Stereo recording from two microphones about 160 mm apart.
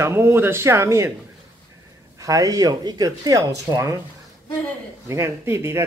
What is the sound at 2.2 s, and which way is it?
Speech, 20° right (ahead or behind).